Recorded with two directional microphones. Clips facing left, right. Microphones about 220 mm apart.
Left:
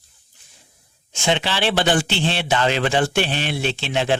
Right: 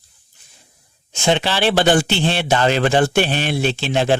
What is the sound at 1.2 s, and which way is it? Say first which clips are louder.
A man's voice: right 4 dB; 45° right (ahead or behind).